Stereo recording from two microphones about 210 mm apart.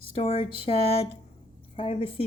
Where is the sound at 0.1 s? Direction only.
25° left (ahead or behind).